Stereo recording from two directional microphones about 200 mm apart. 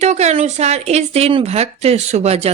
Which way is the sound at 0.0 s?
35° right (ahead or behind).